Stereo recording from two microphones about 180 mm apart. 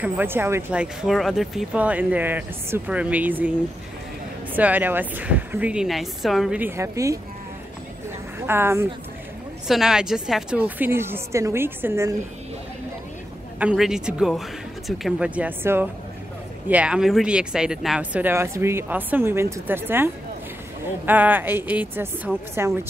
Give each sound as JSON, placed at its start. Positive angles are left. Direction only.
{"t": 0.0, "sound": "speech", "side_deg": -10}
{"t": 4.6, "sound": "speech", "side_deg": -10}
{"t": 8.4, "sound": "a woman's voice", "side_deg": -15}
{"t": 9.7, "sound": "speech", "side_deg": -5}
{"t": 13.6, "sound": "speech", "side_deg": -5}